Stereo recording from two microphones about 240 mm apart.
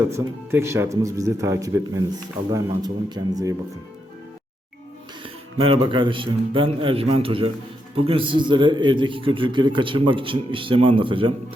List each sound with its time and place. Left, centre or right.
0.1 s speech: centre
5.5 s a man's voice: right